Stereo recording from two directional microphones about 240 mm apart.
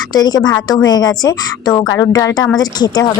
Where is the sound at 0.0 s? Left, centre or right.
Centre.